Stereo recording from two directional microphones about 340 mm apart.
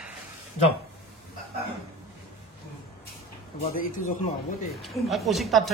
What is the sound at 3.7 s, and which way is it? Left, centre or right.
Speech, left.